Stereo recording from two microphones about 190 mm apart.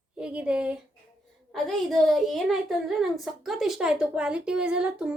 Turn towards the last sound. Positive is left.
turn(degrees=-5)  # may be behind; listen again after turning